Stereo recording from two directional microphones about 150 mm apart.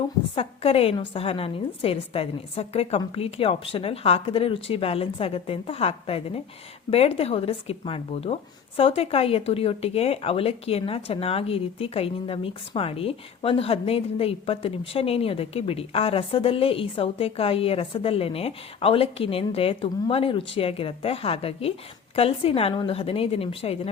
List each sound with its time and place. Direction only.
0.3 s speech: 40° left (ahead or behind)